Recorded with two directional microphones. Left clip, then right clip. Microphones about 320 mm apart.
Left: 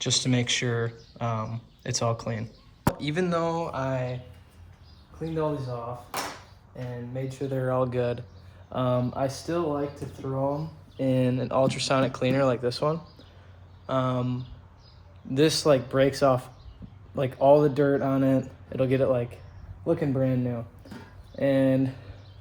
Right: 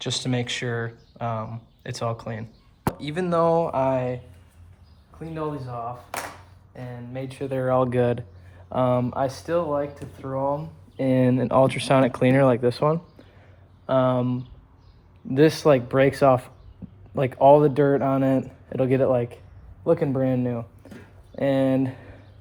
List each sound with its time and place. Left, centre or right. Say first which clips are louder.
0.0 s speech: left 1 dB; centre; by 4.2 s right
7.3 s speech: right 5 dB; right